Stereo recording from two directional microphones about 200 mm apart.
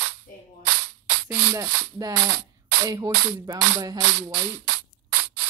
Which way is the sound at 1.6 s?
15° right (ahead or behind).